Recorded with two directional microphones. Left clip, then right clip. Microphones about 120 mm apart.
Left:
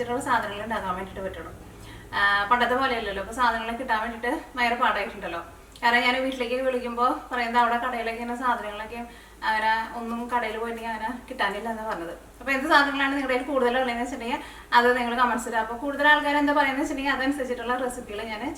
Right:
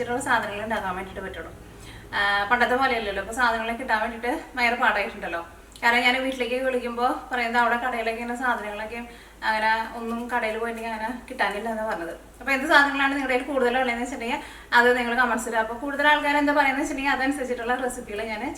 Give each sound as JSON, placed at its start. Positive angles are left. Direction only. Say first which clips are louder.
{"t": 0.1, "sound": "a woman's voice", "louder": "right 2 dB", "side_deg": 0}
{"t": 2.1, "sound": "a woman's voice", "louder": "even", "side_deg": 0}
{"t": 12.5, "sound": "a woman's voice", "louder": "right 2 dB", "side_deg": 0}